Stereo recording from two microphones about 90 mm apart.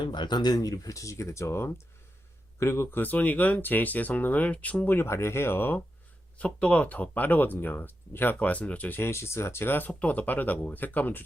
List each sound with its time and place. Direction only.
0.0 s speech: 55° left (ahead or behind); by 4.9 s 15° left (ahead or behind)
4.9 s speech: 30° left (ahead or behind)
6.4 s speech: 15° left (ahead or behind)